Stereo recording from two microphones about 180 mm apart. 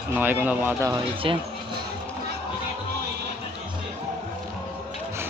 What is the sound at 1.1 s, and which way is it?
Speech, 30° right (ahead or behind).